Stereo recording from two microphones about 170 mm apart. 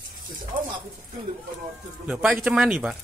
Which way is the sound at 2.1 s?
5° right (ahead or behind).